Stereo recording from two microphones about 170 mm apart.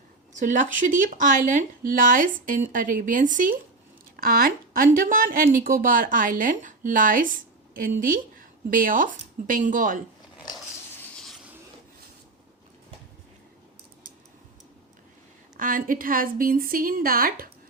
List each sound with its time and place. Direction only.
0.3 s speech: 50° right (ahead or behind)
15.5 s speech: 50° right (ahead or behind)